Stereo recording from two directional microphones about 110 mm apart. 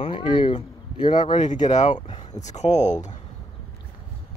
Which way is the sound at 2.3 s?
90° left.